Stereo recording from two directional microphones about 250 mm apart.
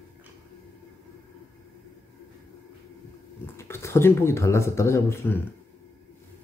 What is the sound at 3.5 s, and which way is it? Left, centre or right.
Speech, centre.